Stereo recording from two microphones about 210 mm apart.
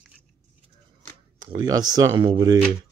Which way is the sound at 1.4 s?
20° right (ahead or behind).